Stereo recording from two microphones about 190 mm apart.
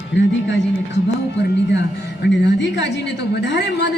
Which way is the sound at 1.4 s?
65° left (ahead or behind).